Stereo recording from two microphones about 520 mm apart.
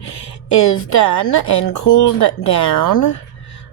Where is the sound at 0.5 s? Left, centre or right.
Left.